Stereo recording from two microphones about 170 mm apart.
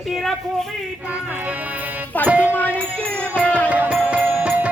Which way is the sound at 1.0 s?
10° right (ahead or behind).